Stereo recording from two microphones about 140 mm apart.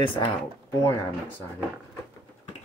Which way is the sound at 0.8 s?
20° left (ahead or behind).